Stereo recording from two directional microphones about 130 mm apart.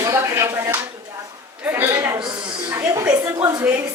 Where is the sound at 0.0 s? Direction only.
20° right (ahead or behind).